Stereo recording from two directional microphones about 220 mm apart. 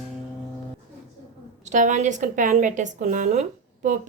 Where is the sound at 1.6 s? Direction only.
35° right (ahead or behind).